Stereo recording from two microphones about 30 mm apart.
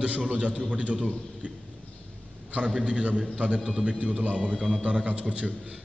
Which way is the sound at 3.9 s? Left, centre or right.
Right.